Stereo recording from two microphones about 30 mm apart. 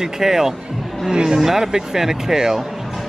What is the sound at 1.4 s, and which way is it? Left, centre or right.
Speech, centre.